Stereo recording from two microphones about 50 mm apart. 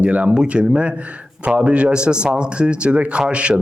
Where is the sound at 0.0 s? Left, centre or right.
Right.